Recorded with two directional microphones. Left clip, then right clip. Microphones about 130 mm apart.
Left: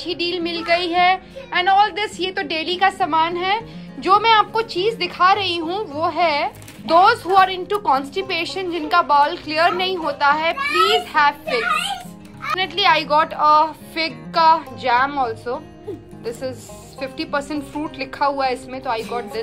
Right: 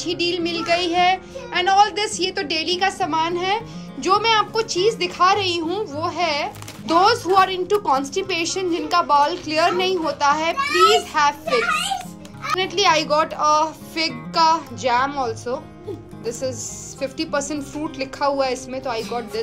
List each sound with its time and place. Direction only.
0.0 s a woman's voice: 20° right (ahead or behind)